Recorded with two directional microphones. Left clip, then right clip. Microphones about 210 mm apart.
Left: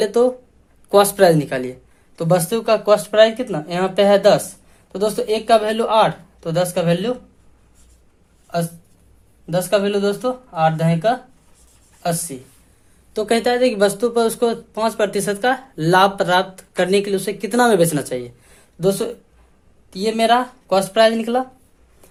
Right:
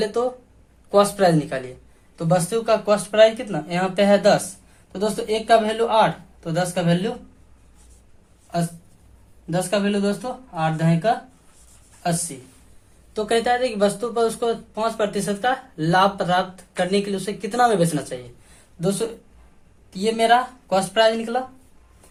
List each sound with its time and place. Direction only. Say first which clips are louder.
0.0 s speech: left 6 dB; 45° left (ahead or behind)
9.5 s speech: left 5 dB; 40° left (ahead or behind)